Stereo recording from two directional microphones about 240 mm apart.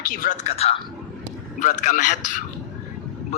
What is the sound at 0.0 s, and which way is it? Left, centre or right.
Speech, left.